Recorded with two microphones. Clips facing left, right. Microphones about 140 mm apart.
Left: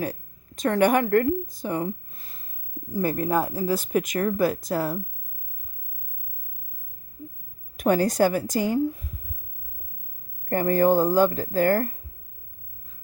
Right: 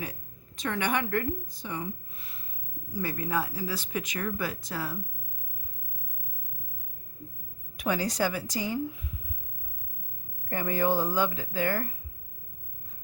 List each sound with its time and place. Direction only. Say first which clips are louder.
0.0 s a woman's voice: left 9 dB; 45° left (ahead or behind)
3.0 s speech: left 7 dB; 50° left (ahead or behind)
7.8 s speech: left 8 dB; 50° left (ahead or behind)
10.5 s speech: left 8 dB; 45° left (ahead or behind)